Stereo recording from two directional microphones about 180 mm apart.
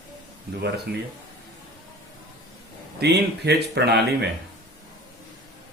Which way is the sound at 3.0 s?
70° right (ahead or behind).